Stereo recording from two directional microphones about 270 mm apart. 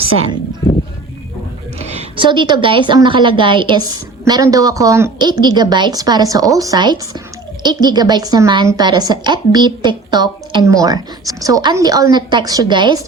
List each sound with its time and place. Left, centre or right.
1.8 s a woman's voice: right